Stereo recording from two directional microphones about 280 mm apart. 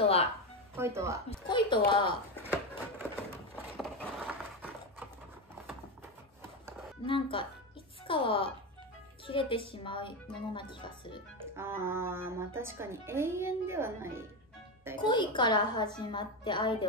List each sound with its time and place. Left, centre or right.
0.0 s music: left
0.7 s speech: centre
1.9 s speech: centre
2.4 s a sound: centre
7.1 s speech: centre
11.5 s speech: centre
15.0 s speech: centre